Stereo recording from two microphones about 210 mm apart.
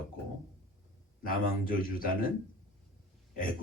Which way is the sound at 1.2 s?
40° left (ahead or behind).